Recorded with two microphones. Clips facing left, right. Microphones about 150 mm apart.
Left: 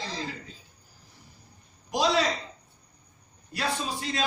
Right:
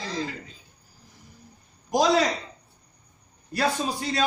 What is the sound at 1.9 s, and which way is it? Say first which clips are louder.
Speech: right 4 dB; 45° right (ahead or behind).